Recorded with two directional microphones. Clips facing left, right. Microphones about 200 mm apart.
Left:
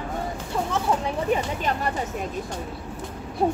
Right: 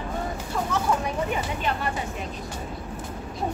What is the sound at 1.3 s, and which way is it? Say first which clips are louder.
Speech: left 3 dB; 40° left (ahead or behind).